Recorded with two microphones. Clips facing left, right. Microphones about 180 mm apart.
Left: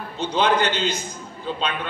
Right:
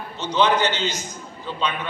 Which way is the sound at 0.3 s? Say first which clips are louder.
Right 1 dB; 55° left (ahead or behind).